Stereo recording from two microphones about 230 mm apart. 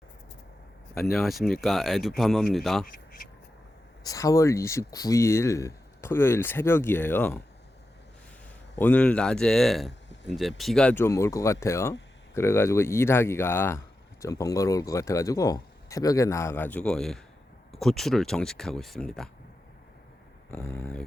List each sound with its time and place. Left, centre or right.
0.9 s speech: centre
2.8 s speech: left
4.0 s speech: centre
8.7 s speech: centre
20.5 s speech: centre